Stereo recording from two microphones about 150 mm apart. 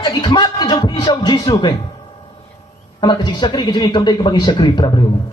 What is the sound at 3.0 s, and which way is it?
A man's voice, 30° left (ahead or behind).